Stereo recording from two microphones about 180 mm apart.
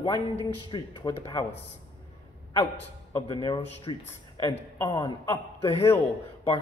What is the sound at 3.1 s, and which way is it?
A man's voice, 20° left (ahead or behind).